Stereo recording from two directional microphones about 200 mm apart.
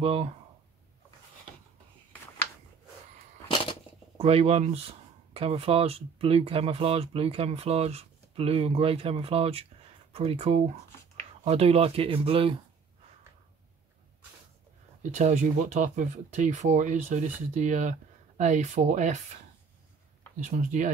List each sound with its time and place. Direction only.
0.0 s speech: 30° right (ahead or behind)
4.2 s speech: 30° right (ahead or behind)
15.0 s speech: 35° right (ahead or behind)
20.3 s speech: 40° right (ahead or behind)